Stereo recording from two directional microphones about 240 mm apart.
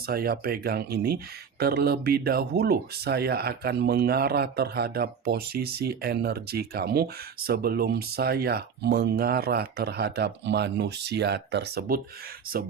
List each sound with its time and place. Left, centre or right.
0.1 s speech: right